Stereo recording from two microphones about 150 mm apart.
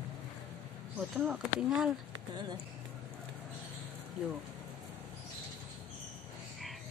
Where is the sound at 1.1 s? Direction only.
5° right (ahead or behind).